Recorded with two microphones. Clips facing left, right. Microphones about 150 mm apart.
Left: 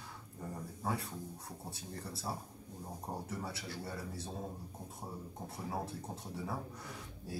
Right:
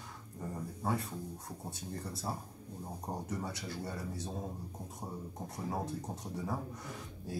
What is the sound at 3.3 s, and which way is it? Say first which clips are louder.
Speech: right 3 dB; centre (ahead or behind).